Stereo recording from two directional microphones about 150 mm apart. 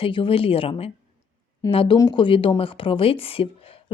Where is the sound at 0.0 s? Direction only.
35° left (ahead or behind).